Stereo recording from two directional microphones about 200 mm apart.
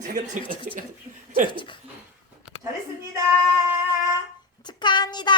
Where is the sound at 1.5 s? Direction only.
25° left (ahead or behind).